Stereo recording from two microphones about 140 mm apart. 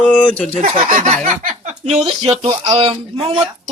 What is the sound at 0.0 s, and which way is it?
Speech, 10° left (ahead or behind).